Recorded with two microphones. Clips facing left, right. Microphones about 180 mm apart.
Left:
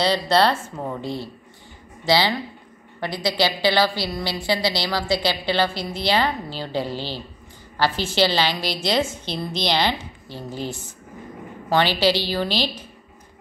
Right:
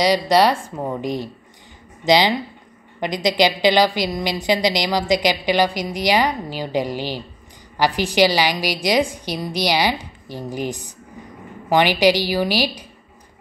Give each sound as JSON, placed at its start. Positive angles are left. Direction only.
{"t": 0.0, "sound": "a woman's voice", "side_deg": -15}